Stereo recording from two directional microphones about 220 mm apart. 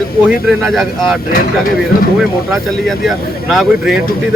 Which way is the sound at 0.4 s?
Centre (ahead or behind).